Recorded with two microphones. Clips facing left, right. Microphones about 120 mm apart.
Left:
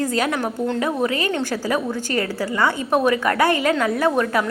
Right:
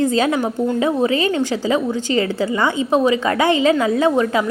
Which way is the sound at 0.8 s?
25° right (ahead or behind).